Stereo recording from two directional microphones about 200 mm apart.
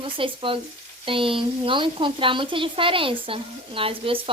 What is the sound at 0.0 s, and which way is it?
A woman's voice, 25° right (ahead or behind).